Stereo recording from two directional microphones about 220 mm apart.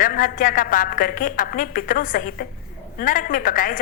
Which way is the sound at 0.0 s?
40° left (ahead or behind).